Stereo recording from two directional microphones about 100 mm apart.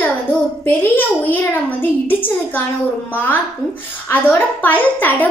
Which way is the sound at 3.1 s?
20° left (ahead or behind).